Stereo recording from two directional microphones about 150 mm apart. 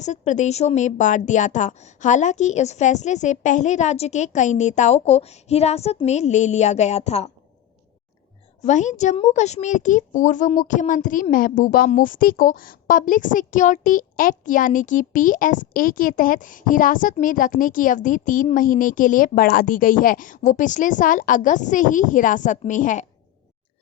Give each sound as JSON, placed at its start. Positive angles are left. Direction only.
{"t": 0.0, "sound": "a woman's voice", "side_deg": 50}
{"t": 8.6, "sound": "a woman's voice", "side_deg": 55}